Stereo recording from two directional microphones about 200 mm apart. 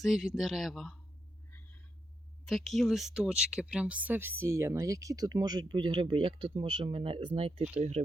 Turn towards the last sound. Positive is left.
turn(degrees=-30)  # may be behind; listen again after turning